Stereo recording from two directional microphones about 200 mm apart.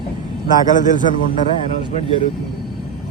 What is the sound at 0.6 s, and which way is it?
Speech, 40° left (ahead or behind).